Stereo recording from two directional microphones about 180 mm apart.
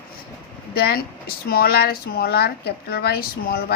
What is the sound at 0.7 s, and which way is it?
Speech, 60° left (ahead or behind).